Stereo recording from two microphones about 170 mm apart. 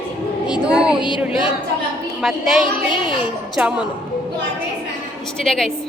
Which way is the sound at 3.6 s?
5° right (ahead or behind).